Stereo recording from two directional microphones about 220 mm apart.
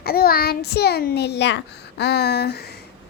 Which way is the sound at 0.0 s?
45° left (ahead or behind).